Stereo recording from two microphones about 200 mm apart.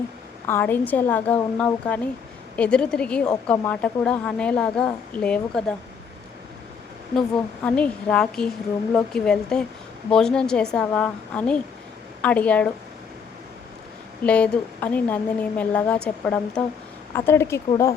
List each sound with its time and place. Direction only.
0.4 s speech: 10° left (ahead or behind)
7.2 s speech: 5° left (ahead or behind)
14.3 s speech: 5° left (ahead or behind)